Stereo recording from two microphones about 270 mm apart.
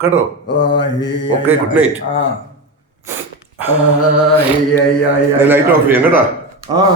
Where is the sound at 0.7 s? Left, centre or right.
Centre.